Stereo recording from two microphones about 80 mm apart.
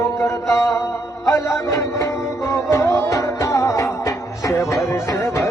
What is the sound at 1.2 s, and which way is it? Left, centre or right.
Music, left.